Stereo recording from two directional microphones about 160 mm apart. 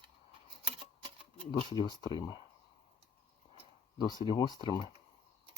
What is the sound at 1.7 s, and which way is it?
Speech, 25° left (ahead or behind).